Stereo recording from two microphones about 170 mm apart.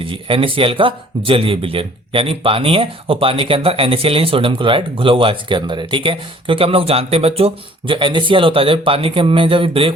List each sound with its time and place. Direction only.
0.0 s a man's voice: 30° right (ahead or behind)